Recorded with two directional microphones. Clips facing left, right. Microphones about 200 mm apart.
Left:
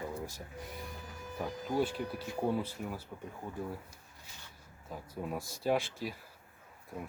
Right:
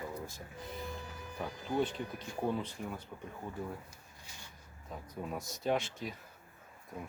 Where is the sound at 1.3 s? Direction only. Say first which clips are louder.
Left 1 dB; 5° left (ahead or behind).